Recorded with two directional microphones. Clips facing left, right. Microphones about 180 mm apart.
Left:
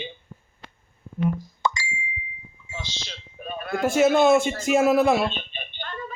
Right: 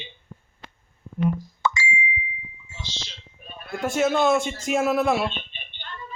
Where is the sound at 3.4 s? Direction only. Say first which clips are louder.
Left 6 dB; 60° left (ahead or behind).